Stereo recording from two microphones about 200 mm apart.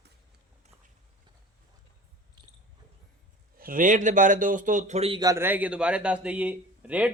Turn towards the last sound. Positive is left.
turn(degrees=-5)  # may be behind; listen again after turning